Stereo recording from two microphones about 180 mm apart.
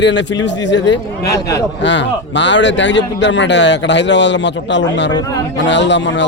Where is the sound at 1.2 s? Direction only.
20° left (ahead or behind).